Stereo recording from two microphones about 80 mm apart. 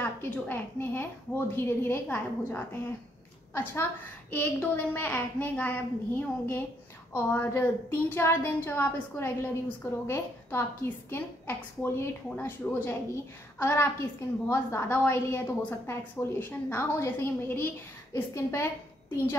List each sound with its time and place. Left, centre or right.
0.0 s a woman's voice: left
4.3 s a woman's voice: left